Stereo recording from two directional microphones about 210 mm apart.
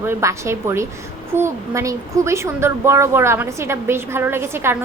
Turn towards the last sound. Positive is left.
turn(degrees=-10)  # may be behind; listen again after turning